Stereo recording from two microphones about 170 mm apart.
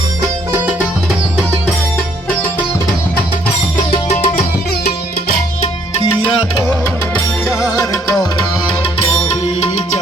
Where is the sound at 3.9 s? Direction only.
40° left (ahead or behind).